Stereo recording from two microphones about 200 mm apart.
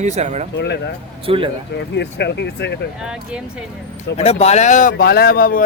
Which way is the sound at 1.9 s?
60° left (ahead or behind).